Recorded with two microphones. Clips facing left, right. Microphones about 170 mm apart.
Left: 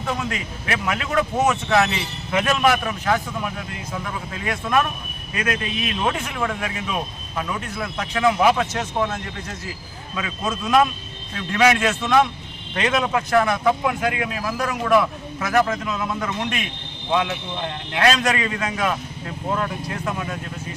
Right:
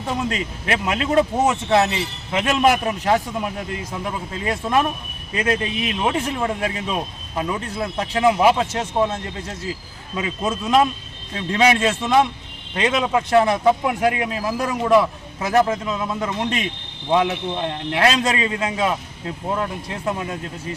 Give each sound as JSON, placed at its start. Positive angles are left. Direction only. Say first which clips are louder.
{"t": 0.0, "sound": "a man's voice", "louder": "right 2 dB", "side_deg": -30}
{"t": 17.7, "sound": "a man's voice", "louder": "even", "side_deg": -30}